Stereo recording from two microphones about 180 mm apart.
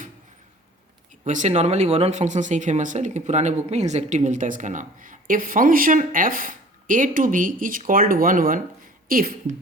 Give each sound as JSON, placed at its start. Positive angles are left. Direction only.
{"t": 1.2, "sound": "speech", "side_deg": -40}